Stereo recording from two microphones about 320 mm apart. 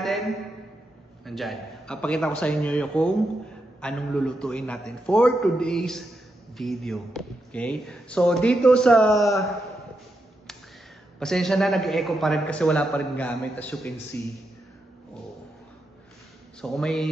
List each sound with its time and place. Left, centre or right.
0.0 s a sound: centre
1.2 s speech: centre
11.1 s speech: centre
16.6 s speech: centre